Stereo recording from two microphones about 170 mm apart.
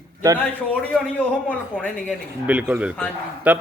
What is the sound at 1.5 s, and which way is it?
Speech, 10° left (ahead or behind).